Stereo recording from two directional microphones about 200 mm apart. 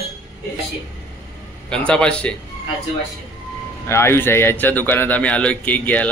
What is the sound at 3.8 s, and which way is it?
Speech, 10° left (ahead or behind).